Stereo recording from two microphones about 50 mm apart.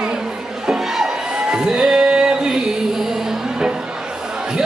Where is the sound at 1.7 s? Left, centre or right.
Centre.